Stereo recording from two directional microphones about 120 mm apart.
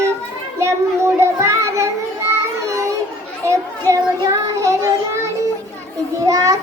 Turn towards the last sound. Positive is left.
turn(degrees=-30)  # may be behind; listen again after turning